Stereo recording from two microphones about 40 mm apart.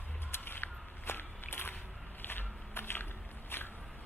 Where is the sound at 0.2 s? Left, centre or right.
Left.